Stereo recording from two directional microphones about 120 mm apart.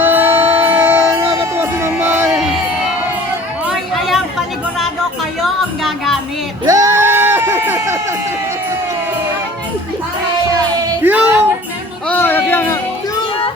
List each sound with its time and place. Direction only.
0.0 s music: 15° right (ahead or behind)
3.7 s chatter: centre (ahead or behind)
5.4 s music: centre (ahead or behind)
6.7 s a sound: 30° right (ahead or behind)
11.0 s music: 20° right (ahead or behind)
12.0 s a sound: 15° left (ahead or behind)